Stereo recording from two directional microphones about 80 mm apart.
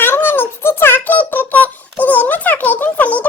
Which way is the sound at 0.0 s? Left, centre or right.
Left.